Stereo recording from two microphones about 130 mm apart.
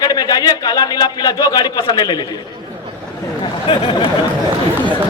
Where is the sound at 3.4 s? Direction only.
40° left (ahead or behind).